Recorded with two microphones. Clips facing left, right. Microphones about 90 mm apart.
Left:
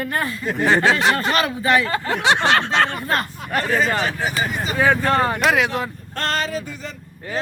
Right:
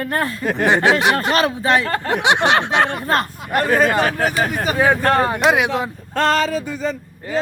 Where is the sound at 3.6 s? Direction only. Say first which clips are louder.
Right 4 dB; 55° right (ahead or behind).